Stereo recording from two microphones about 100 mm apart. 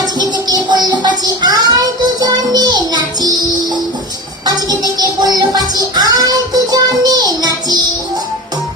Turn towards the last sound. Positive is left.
turn(degrees=-40)  # may be behind; listen again after turning